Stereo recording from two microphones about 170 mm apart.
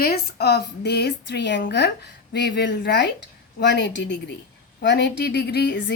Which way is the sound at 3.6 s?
90° left.